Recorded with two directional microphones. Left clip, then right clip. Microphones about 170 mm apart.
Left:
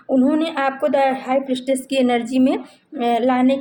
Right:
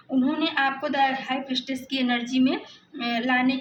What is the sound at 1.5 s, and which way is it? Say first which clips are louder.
Speech: left 8 dB; 60° left (ahead or behind).